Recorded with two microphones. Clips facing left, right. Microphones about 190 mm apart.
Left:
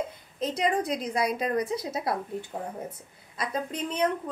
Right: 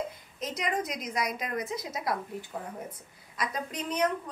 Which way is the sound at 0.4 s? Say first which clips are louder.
Left 5 dB; 30° left (ahead or behind).